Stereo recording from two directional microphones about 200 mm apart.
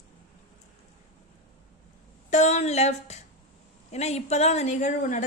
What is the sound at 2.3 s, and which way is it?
A woman's voice, 35° left (ahead or behind).